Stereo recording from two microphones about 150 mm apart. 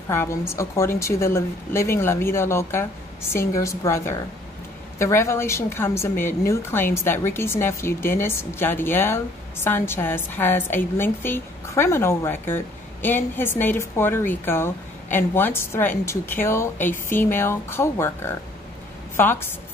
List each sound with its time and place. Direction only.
0.1 s a woman's voice: 15° left (ahead or behind)